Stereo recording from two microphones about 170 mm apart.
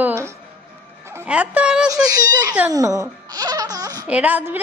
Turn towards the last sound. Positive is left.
turn(degrees=-10)  # may be behind; listen again after turning